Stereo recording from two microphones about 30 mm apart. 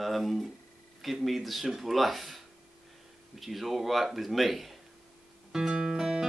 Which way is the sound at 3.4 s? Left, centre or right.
Centre.